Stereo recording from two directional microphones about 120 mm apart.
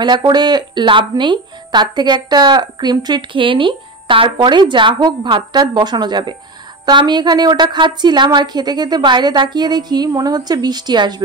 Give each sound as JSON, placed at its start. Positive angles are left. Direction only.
{"t": 0.0, "sound": "a woman's voice", "side_deg": -35}